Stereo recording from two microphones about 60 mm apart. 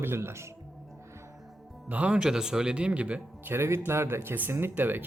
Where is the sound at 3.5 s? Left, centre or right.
Right.